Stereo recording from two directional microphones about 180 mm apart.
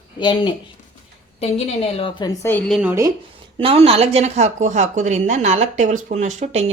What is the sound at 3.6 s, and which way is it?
Speech, 30° right (ahead or behind).